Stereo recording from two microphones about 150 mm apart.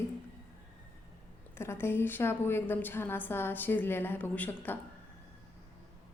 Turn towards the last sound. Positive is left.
turn(degrees=10)  # may be behind; listen again after turning